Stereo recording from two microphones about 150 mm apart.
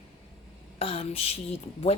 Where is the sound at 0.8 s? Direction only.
40° left (ahead or behind).